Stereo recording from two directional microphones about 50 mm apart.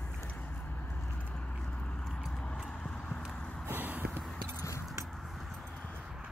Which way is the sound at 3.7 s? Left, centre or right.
Right.